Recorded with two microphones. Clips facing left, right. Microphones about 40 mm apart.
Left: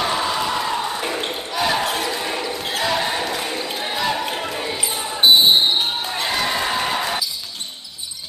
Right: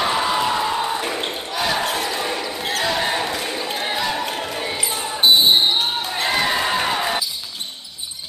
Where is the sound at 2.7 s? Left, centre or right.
Centre.